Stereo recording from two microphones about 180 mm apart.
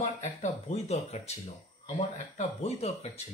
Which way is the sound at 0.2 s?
35° left (ahead or behind).